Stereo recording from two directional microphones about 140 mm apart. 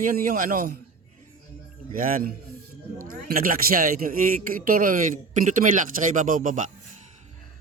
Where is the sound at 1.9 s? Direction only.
90° right.